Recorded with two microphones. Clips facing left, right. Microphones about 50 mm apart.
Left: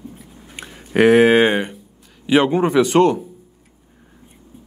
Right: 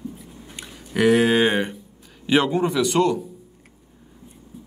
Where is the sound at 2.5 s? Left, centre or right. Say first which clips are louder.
Left 5 dB; left.